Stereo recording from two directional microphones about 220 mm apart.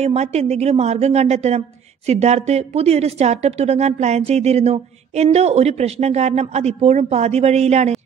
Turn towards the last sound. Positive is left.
turn(degrees=-30)  # may be behind; listen again after turning